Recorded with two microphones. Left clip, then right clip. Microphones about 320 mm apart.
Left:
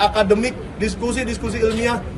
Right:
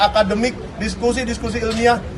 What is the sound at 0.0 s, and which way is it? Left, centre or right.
A man's voice, centre.